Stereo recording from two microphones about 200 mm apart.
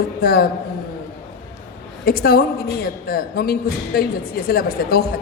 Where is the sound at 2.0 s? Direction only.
45° left (ahead or behind).